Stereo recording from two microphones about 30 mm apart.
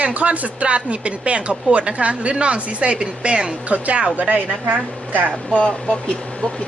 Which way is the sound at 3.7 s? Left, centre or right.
Right.